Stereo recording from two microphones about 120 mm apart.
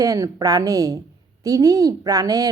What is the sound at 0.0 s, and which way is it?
A woman's voice, 30° right (ahead or behind).